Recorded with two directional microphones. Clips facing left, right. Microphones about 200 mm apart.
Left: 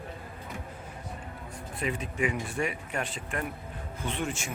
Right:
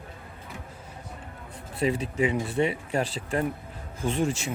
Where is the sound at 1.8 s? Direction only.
30° right (ahead or behind).